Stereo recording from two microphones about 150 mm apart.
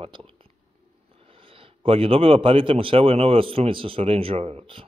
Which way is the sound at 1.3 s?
35° right (ahead or behind).